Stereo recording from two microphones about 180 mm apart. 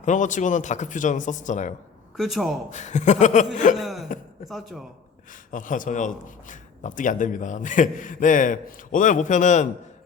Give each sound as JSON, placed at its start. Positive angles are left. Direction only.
{"t": 0.0, "sound": "a man's voice", "side_deg": 45}
{"t": 2.1, "sound": "a man's voice", "side_deg": 0}
{"t": 2.6, "sound": "speech", "side_deg": 40}
{"t": 3.8, "sound": "a man's voice", "side_deg": 0}
{"t": 5.3, "sound": "a man's voice", "side_deg": 45}